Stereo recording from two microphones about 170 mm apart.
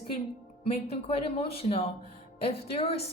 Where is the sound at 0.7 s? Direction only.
35° left (ahead or behind).